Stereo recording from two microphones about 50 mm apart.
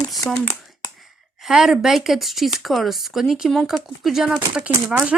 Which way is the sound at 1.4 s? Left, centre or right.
Centre.